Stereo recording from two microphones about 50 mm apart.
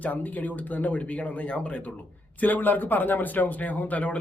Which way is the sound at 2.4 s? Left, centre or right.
Left.